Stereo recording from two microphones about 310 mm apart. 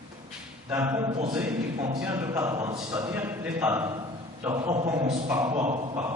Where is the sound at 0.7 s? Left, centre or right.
Centre.